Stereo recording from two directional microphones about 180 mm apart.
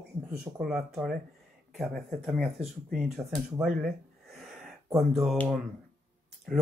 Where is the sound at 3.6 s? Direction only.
Centre (ahead or behind).